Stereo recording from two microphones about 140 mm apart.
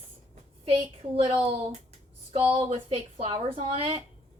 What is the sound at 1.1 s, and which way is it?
A woman's voice, 40° right (ahead or behind).